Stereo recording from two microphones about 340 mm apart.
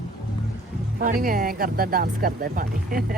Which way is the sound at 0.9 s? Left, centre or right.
Right.